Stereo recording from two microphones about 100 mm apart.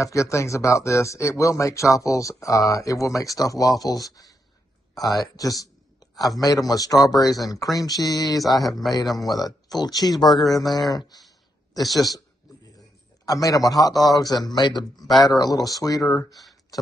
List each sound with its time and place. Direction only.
0.0 s speech: 30° left (ahead or behind)
4.9 s a sound: 40° left (ahead or behind)
6.4 s speech: 40° left (ahead or behind)
13.2 s speech: 35° left (ahead or behind)
16.3 s speech: centre (ahead or behind)